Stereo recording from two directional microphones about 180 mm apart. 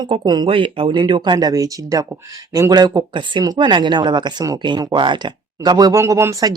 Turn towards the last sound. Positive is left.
turn(degrees=-20)  # may be behind; listen again after turning